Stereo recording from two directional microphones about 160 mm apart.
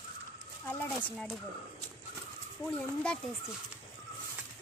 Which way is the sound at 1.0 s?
5° left (ahead or behind).